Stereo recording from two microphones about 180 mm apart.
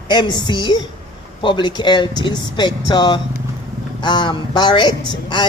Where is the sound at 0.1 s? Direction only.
25° left (ahead or behind).